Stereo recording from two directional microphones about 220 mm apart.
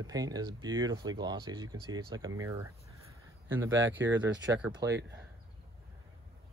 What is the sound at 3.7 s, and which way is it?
Speech, 55° right (ahead or behind).